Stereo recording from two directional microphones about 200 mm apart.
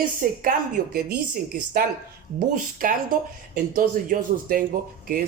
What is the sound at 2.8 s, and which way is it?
Speech, 45° right (ahead or behind).